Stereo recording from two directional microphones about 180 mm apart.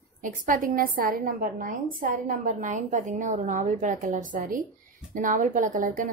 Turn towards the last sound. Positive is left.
turn(degrees=-50)  # may be behind; listen again after turning